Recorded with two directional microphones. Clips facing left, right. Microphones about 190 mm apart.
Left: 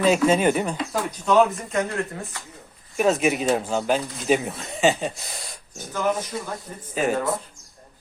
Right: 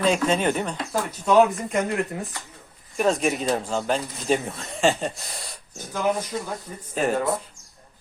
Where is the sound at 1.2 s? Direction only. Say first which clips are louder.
Right 1 dB; 5° right (ahead or behind).